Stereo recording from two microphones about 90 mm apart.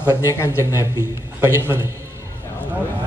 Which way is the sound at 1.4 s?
30° right (ahead or behind).